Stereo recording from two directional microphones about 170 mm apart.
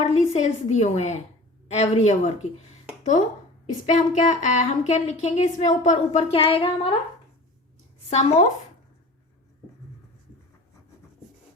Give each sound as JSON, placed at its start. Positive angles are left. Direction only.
{"t": 0.0, "sound": "a woman's voice", "side_deg": 40}
{"t": 8.1, "sound": "a woman's voice", "side_deg": 45}